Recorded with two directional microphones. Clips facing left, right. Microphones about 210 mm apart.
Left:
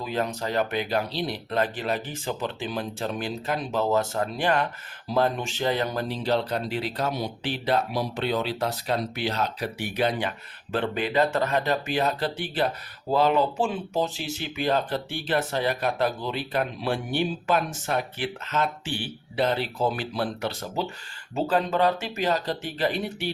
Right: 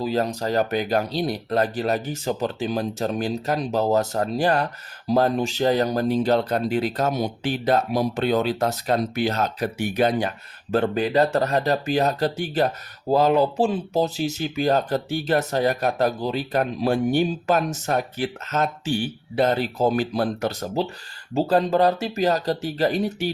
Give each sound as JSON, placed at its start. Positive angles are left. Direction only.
{"t": 0.0, "sound": "speech", "side_deg": -35}